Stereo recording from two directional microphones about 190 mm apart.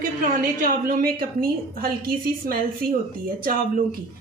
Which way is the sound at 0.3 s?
45° right (ahead or behind).